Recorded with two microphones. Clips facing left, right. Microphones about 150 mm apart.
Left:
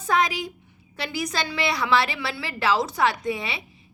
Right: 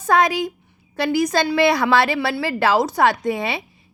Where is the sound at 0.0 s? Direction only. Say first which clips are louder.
Right 6 dB; 50° right (ahead or behind).